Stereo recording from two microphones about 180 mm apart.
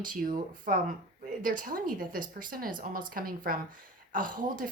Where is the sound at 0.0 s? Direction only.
50° right (ahead or behind).